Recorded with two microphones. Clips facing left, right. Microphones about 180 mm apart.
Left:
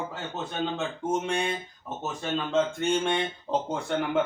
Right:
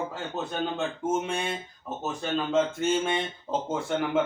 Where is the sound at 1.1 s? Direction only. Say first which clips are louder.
Left 2 dB; 5° right (ahead or behind).